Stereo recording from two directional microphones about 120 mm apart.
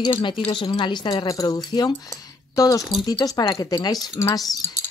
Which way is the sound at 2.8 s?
Centre (ahead or behind).